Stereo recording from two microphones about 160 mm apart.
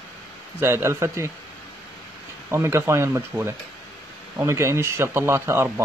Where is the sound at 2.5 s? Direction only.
15° right (ahead or behind).